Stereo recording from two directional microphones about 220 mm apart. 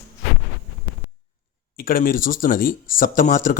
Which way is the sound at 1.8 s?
40° left (ahead or behind).